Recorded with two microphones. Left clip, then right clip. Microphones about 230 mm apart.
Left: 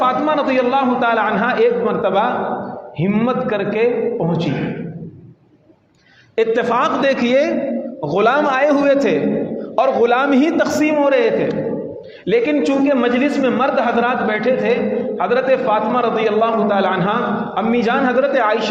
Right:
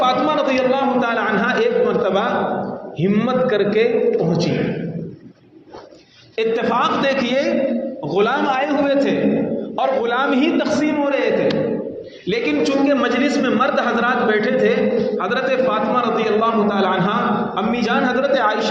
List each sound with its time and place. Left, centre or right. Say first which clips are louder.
0.0 s a man's voice: left 1 dB; left
6.3 s a man's voice: left 2 dB; left
12.3 s a man's voice: left 3 dB; left